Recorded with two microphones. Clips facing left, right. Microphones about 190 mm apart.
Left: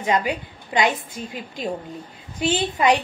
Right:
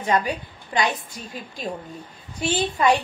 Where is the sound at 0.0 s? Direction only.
15° left (ahead or behind).